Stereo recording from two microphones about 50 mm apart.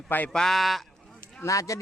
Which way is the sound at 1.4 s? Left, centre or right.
Left.